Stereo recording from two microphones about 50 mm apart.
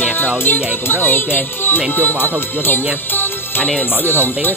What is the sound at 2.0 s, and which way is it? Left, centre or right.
Music, left.